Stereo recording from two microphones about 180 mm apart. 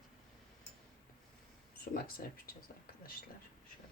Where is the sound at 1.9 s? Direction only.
55° left (ahead or behind).